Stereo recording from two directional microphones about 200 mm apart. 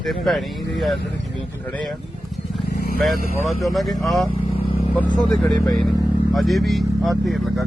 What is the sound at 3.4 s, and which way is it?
Speech, centre (ahead or behind).